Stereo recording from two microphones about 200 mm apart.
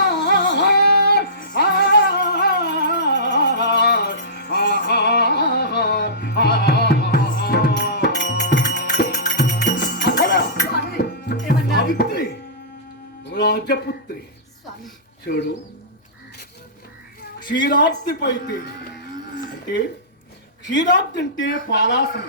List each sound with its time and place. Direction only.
0.0 s music: 60° left (ahead or behind)
13.3 s music: 55° left (ahead or behind)
15.3 s speech: 50° left (ahead or behind)
17.7 s speech: 55° left (ahead or behind)
20.9 s speech: 60° left (ahead or behind)